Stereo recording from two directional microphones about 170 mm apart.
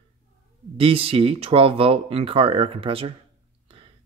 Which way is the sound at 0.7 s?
35° right (ahead or behind).